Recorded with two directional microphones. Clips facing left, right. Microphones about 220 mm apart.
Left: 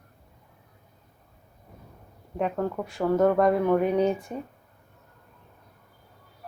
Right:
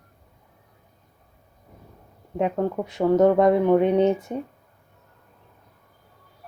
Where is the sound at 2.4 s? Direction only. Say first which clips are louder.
Right 4 dB; 20° right (ahead or behind).